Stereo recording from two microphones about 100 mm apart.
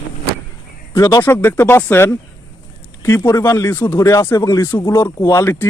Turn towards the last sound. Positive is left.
turn(degrees=25)  # may be behind; listen again after turning